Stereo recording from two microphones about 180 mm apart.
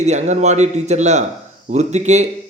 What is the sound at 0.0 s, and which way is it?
A man's voice, 40° right (ahead or behind).